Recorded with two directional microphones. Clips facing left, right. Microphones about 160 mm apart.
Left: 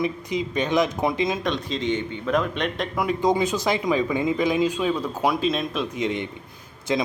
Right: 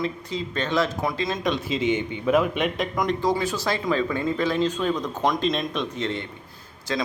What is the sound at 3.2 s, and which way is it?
A man's voice, 20° left (ahead or behind).